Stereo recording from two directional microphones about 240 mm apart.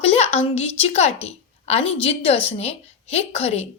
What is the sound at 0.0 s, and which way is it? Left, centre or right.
A woman's voice, left.